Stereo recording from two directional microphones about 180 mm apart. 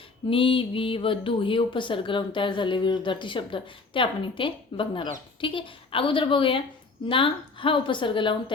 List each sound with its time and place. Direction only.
0.3 s speech: 30° left (ahead or behind)